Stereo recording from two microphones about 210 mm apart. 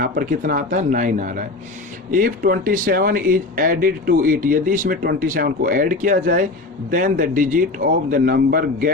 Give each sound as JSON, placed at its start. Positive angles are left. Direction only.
{"t": 0.0, "sound": "speech", "side_deg": -40}